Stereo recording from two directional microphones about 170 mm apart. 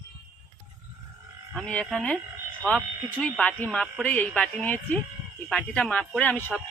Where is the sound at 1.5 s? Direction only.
5° left (ahead or behind).